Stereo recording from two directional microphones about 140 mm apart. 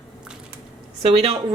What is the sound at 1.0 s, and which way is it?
Speech, 40° right (ahead or behind).